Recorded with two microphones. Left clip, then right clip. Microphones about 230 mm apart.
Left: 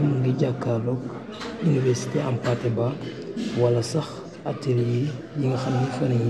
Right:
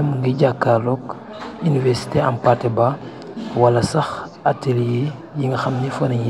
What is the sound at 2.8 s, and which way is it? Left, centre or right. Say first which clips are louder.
Speech: right 9 dB; right.